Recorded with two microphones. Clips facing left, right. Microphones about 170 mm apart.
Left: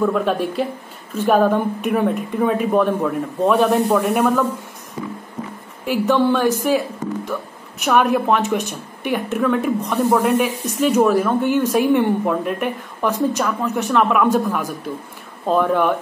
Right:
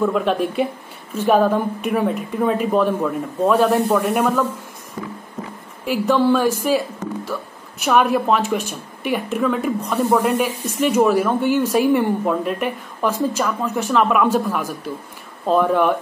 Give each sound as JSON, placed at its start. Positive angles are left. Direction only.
{"t": 0.0, "sound": "speech", "side_deg": 0}
{"t": 5.0, "sound": "music", "side_deg": 20}
{"t": 5.9, "sound": "speech", "side_deg": -5}
{"t": 10.1, "sound": "speech", "side_deg": -10}